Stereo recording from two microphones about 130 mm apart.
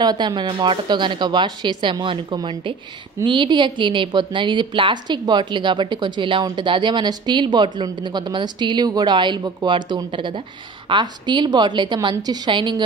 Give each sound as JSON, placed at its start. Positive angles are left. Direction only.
{"t": 0.0, "sound": "a woman's voice", "side_deg": -35}